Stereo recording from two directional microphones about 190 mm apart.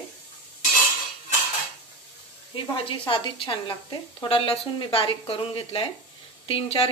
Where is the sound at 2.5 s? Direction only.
30° left (ahead or behind).